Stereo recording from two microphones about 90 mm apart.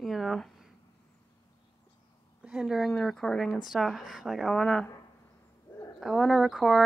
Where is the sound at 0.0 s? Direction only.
Centre (ahead or behind).